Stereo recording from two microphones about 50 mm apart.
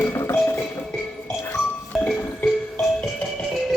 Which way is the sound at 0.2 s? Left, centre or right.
Left.